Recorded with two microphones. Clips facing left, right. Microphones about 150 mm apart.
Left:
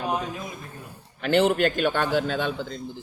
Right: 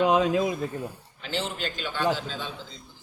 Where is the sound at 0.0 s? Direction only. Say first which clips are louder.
Right 8 dB; 90° right.